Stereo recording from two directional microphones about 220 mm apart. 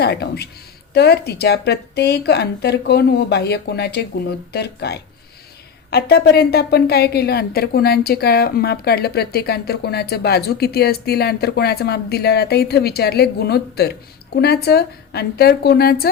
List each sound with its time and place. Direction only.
0.0 s a woman's voice: 45° left (ahead or behind)